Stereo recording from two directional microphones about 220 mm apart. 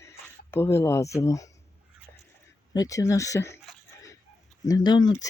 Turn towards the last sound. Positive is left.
turn(degrees=15)  # may be behind; listen again after turning